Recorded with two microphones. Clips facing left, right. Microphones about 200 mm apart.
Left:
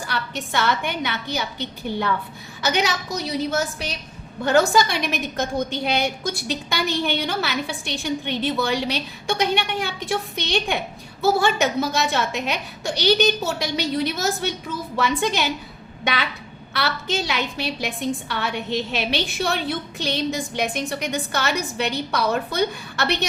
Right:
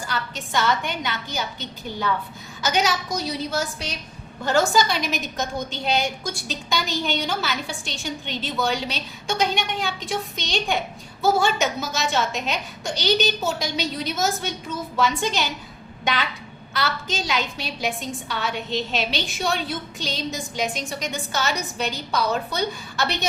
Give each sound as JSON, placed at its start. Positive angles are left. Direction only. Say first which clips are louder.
{"t": 0.1, "sound": "a woman's voice", "louder": "even", "side_deg": 60}
{"t": 4.4, "sound": "a woman's voice", "louder": "left 2 dB", "side_deg": 60}
{"t": 16.7, "sound": "a woman's voice", "louder": "left 2 dB", "side_deg": 60}